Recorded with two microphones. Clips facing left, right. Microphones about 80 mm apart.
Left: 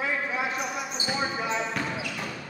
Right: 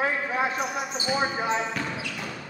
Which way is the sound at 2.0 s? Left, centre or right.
Centre.